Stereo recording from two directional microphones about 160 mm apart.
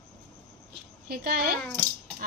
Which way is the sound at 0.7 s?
75° right (ahead or behind).